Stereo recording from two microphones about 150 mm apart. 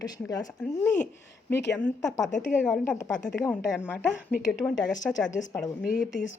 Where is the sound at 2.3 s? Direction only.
55° left (ahead or behind).